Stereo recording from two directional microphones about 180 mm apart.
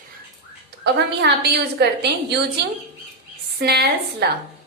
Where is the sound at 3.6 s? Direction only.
60° right (ahead or behind).